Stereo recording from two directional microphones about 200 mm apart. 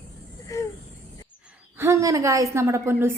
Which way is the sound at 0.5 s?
15° left (ahead or behind).